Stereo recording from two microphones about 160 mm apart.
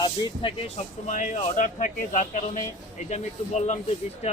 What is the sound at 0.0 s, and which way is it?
Speech, 30° left (ahead or behind).